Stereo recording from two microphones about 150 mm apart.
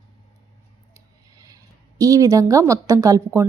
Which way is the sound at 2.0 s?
20° right (ahead or behind).